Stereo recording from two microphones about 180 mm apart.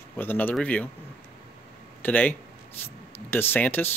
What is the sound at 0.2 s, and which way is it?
Speech, 10° left (ahead or behind).